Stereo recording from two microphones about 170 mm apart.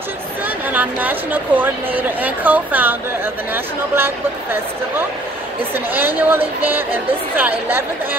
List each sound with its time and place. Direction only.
0.7 s speech: 10° right (ahead or behind)